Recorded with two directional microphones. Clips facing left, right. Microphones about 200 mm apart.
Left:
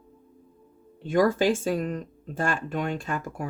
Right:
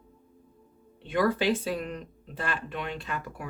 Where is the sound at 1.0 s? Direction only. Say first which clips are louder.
Left 4 dB; 45° left (ahead or behind).